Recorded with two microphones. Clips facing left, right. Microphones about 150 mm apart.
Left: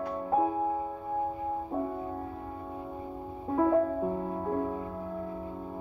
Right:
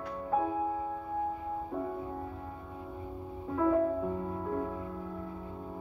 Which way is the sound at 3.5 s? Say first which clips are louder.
Left 2 dB; 35° left (ahead or behind).